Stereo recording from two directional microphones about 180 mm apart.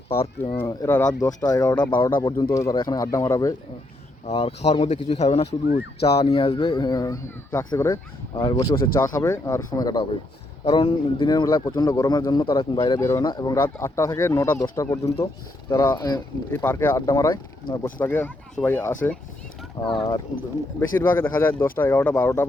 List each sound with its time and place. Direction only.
0.1 s speech: 30° left (ahead or behind)
0.6 s speech: 15° left (ahead or behind)
4.3 s speech: 35° left (ahead or behind)
5.5 s speech: 70° left (ahead or behind)
6.2 s speech: 30° left (ahead or behind)
13.0 s speech: 15° left (ahead or behind)
20.1 s speech: 20° left (ahead or behind)